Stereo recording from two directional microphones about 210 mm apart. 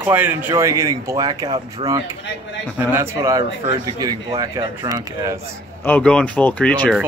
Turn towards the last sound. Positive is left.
turn(degrees=5)  # may be behind; listen again after turning